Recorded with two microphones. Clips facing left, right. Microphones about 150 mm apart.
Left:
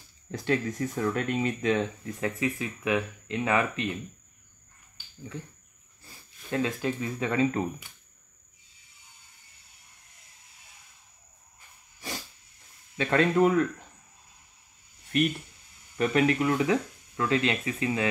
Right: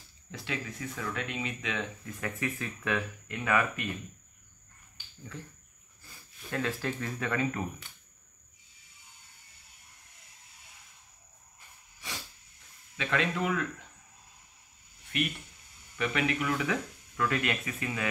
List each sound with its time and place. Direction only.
0.3 s speech: 45° left (ahead or behind); by 3.9 s 25° left (ahead or behind)
6.5 s speech: 15° left (ahead or behind)
12.9 s speech: 40° left (ahead or behind)
16.0 s speech: 40° left (ahead or behind)